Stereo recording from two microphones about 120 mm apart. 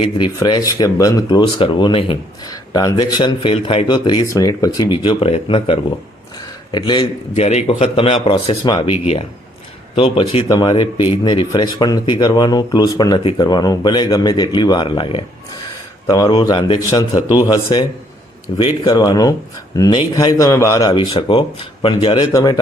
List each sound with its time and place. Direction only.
0.3 s speech: 30° left (ahead or behind)
2.5 s speech: 30° left (ahead or behind)
3.5 s speech: 55° left (ahead or behind)
3.8 s speech: 40° left (ahead or behind)
4.3 s speech: 30° left (ahead or behind)
7.3 s speech: 65° left (ahead or behind); by 15.2 s 45° left (ahead or behind)
16.0 s a man's voice: 30° left (ahead or behind)
21.1 s speech: 45° left (ahead or behind)
22.3 s speech: 30° left (ahead or behind)